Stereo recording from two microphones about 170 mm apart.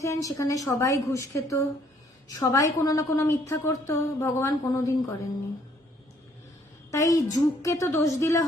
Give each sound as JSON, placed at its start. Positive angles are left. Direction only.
{"t": 0.0, "sound": "a woman's voice", "side_deg": 20}
{"t": 6.9, "sound": "a woman's voice", "side_deg": 20}